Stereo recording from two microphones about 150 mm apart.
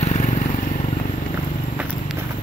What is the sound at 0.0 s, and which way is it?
Vehicle, 55° left (ahead or behind).